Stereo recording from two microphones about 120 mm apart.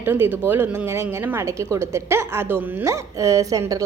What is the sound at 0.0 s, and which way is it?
A woman's voice, 20° right (ahead or behind).